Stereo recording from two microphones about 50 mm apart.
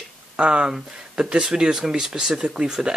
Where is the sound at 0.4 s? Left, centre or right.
Centre.